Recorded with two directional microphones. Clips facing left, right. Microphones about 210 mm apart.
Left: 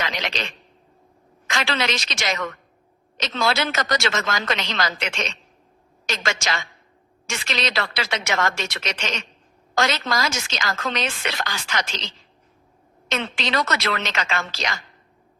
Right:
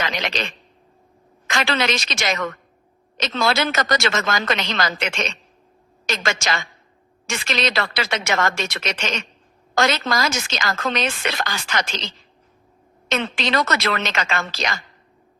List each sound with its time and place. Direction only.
0.0 s speech: 55° right (ahead or behind)
1.5 s a woman's voice: 50° right (ahead or behind)
13.1 s a woman's voice: 50° right (ahead or behind)